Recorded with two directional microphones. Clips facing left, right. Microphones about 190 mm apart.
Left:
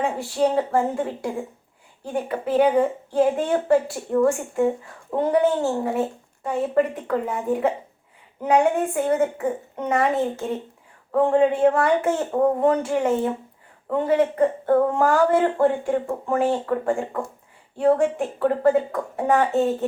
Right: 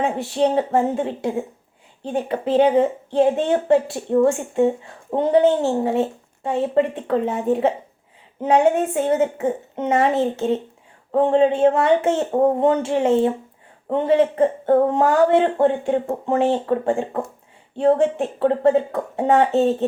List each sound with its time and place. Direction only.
0.0 s a woman's voice: 20° right (ahead or behind)